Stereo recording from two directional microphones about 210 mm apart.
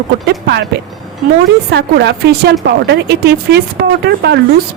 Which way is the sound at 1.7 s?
55° right (ahead or behind).